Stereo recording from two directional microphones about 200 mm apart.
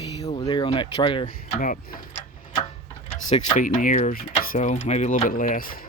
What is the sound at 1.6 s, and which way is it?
Speech, 45° left (ahead or behind).